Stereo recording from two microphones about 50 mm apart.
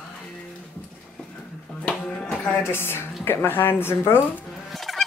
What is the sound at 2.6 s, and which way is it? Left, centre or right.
Speech, left.